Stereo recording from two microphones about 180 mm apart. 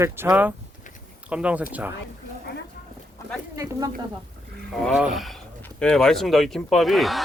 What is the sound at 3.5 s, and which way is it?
Speech, 20° right (ahead or behind).